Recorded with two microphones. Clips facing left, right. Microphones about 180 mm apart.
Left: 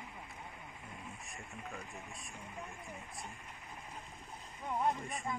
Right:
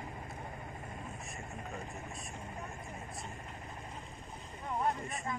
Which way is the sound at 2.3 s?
40° right (ahead or behind).